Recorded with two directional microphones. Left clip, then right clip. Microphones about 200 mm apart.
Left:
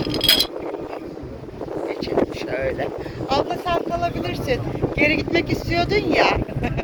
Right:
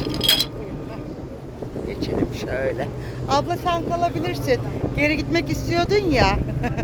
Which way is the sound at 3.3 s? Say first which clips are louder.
Even; 30° right (ahead or behind).